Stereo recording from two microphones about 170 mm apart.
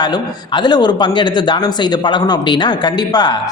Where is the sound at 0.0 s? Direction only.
25° left (ahead or behind).